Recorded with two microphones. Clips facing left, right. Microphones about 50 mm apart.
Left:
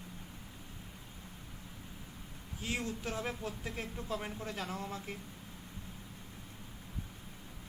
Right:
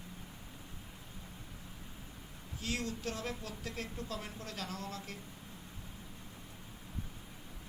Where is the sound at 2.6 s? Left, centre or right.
Centre.